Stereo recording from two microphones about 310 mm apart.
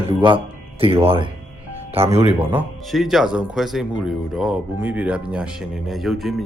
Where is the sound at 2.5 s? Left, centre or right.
Centre.